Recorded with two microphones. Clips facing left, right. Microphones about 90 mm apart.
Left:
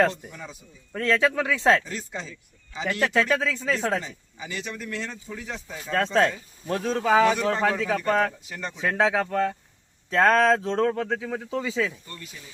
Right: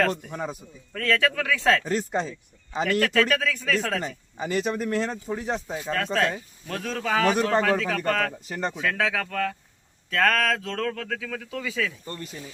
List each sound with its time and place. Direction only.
0.3 s speech: 45° right (ahead or behind)
0.9 s speech: 20° left (ahead or behind)
1.8 s speech: 50° right (ahead or behind)
3.0 s speech: 20° left (ahead or behind)
4.0 s speech: 45° right (ahead or behind)
6.1 s speech: 30° left (ahead or behind)
7.0 s speech: 15° left (ahead or behind)
8.4 s speech: 40° right (ahead or behind)
8.8 s speech: 25° left (ahead or behind)
12.0 s speech: 40° right (ahead or behind)